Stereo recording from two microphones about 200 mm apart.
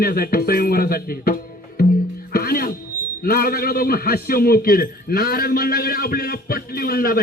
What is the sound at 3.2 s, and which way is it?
A man's voice, 50° left (ahead or behind).